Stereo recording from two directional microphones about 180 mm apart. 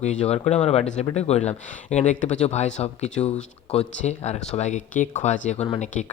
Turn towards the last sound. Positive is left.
turn(degrees=40)  # may be behind; listen again after turning